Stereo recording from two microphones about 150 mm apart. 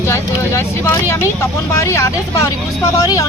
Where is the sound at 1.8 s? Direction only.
20° left (ahead or behind).